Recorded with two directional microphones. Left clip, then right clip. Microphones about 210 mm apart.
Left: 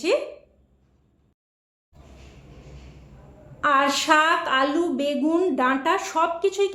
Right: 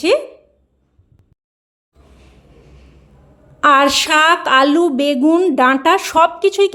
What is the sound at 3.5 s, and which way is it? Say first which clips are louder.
A woman's voice: right 9 dB; 45° right (ahead or behind).